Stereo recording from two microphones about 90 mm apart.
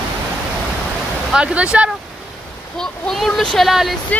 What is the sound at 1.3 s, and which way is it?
Speech, 10° right (ahead or behind).